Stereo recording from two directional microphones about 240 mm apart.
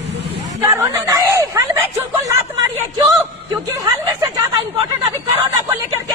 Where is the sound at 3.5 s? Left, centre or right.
Centre.